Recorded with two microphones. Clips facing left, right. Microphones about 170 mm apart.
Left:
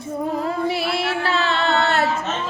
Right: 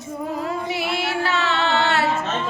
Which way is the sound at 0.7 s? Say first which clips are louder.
Left 2 dB; 30° left (ahead or behind).